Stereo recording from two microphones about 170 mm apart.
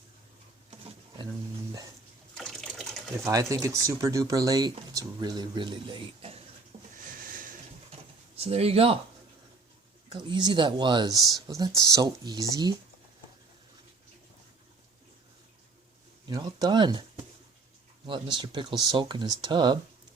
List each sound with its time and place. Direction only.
0.9 s a sound: 30° right (ahead or behind)
2.4 s water: centre (ahead or behind)
3.2 s speech: 20° right (ahead or behind)
6.9 s a sound: 55° right (ahead or behind)
8.4 s speech: 35° right (ahead or behind)
10.1 s speech: 25° right (ahead or behind)
16.2 s speech: 25° right (ahead or behind)
18.0 s speech: 30° right (ahead or behind)